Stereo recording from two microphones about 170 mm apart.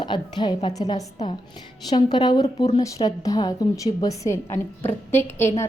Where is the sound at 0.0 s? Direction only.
25° left (ahead or behind).